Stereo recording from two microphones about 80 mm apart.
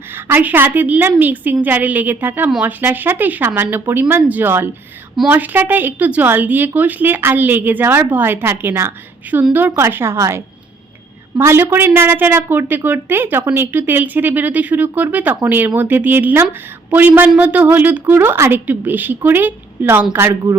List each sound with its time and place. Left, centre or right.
0.3 s speech: right
10.2 s a woman's voice: right
11.3 s speech: right